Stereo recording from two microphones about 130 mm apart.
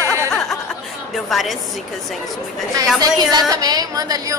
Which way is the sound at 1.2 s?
Centre (ahead or behind).